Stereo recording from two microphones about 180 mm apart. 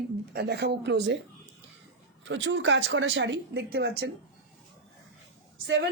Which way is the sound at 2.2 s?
90° right.